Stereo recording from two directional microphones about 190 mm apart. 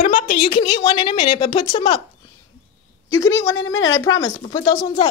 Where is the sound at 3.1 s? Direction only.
20° left (ahead or behind).